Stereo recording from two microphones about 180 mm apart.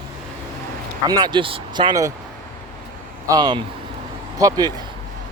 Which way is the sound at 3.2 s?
20° right (ahead or behind).